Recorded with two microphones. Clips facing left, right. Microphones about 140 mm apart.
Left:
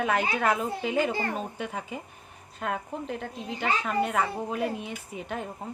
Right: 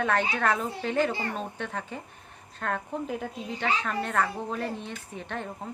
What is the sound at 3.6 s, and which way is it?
Speech, 10° left (ahead or behind).